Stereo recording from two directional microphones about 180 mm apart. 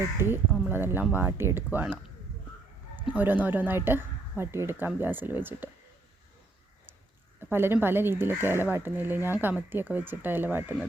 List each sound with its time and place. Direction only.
0.2 s speech: 15° right (ahead or behind)
3.1 s speech: 10° right (ahead or behind)
7.3 s speech: 10° right (ahead or behind)